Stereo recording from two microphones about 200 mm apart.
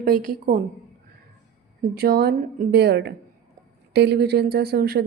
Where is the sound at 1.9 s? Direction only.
50° right (ahead or behind).